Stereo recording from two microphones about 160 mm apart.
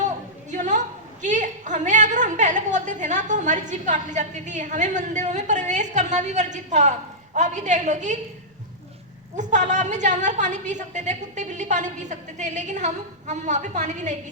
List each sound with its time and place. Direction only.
0.5 s a sound: 50° right (ahead or behind)
1.2 s a woman's voice: 50° right (ahead or behind)
9.3 s a woman's voice: 50° right (ahead or behind)